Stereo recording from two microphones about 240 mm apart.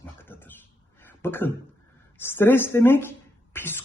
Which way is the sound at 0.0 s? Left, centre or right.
Centre.